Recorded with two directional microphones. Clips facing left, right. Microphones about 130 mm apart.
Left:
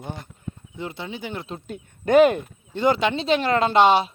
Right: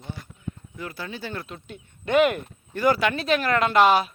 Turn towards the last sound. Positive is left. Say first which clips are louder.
# left 2 dB
turn(degrees=25)  # may be behind; listen again after turning